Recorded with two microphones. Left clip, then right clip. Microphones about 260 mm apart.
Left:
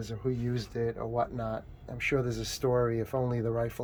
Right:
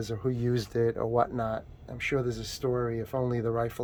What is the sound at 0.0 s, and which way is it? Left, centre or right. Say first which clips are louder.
Speech: right 3 dB; right.